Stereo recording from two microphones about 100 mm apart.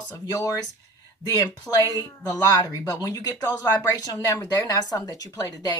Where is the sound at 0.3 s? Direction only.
35° left (ahead or behind).